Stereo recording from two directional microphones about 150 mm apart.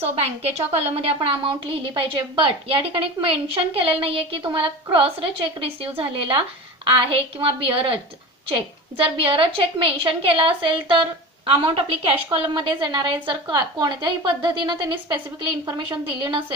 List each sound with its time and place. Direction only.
0.0 s a woman's voice: 45° right (ahead or behind)
9.1 s a woman's voice: 35° right (ahead or behind)